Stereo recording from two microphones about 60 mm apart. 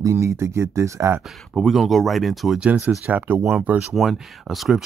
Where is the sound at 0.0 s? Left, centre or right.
Right.